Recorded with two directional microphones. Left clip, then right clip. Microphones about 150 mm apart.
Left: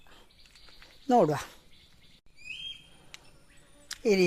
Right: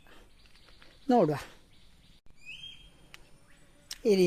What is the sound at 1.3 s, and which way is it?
Speech, 5° right (ahead or behind).